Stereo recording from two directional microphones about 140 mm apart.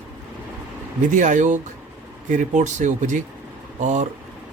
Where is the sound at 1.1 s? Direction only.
65° right (ahead or behind).